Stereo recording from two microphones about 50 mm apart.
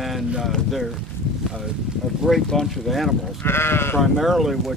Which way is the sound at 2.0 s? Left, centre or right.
Centre.